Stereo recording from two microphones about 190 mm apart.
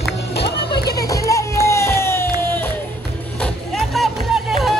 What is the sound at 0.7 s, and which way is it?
Music, 55° left (ahead or behind).